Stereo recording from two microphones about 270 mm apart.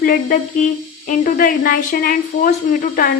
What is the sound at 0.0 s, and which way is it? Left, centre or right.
A woman's voice, left.